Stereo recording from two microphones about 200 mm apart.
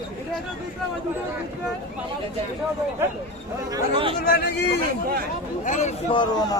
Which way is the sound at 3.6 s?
20° right (ahead or behind).